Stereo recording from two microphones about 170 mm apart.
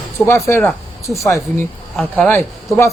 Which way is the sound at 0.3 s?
15° left (ahead or behind).